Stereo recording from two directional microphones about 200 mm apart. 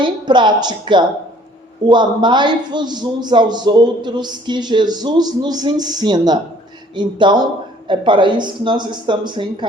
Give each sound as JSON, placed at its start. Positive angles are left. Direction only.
{"t": 0.0, "sound": "a man's voice", "side_deg": -25}